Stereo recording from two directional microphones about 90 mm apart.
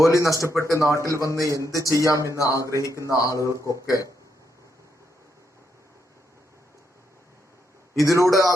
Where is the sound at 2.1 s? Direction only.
35° right (ahead or behind).